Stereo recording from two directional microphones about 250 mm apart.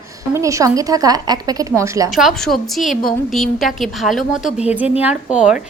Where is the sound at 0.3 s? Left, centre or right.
Centre.